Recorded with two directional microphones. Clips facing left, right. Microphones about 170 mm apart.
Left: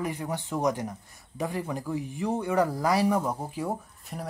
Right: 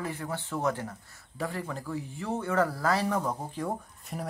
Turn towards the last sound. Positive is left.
turn(degrees=5)  # may be behind; listen again after turning